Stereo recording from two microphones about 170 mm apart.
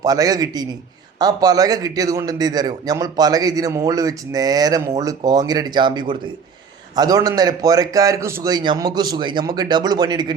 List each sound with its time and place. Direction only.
0.0 s a man's voice: 20° right (ahead or behind)